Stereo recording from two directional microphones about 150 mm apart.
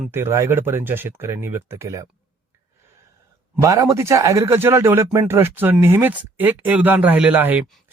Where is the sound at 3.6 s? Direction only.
20° right (ahead or behind).